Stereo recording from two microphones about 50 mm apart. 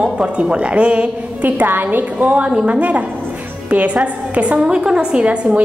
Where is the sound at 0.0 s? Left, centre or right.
Right.